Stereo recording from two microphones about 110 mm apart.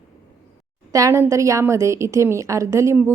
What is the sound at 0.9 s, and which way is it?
A woman's voice, 30° right (ahead or behind).